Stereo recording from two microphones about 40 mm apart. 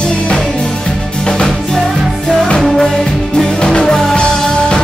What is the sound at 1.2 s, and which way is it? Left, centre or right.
Music, left.